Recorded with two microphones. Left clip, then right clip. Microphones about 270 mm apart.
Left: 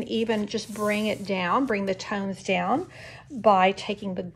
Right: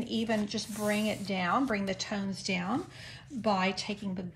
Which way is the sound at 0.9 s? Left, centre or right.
Centre.